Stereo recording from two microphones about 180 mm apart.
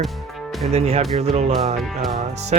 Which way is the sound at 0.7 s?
35° right (ahead or behind).